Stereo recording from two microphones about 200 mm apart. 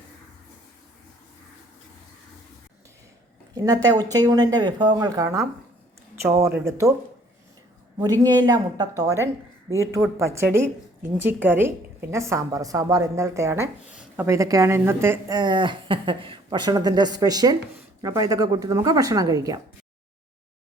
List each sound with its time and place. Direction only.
3.5 s a woman's voice: 20° right (ahead or behind)
7.9 s a woman's voice: 20° right (ahead or behind)